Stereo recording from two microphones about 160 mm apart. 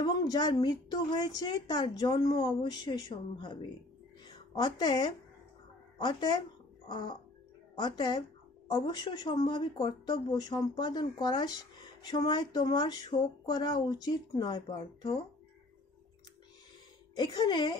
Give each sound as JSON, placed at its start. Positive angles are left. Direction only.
{"t": 0.0, "sound": "a woman's voice", "side_deg": 25}
{"t": 17.1, "sound": "speech", "side_deg": 25}